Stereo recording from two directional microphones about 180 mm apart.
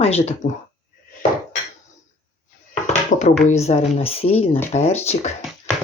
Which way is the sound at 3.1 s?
45° left (ahead or behind).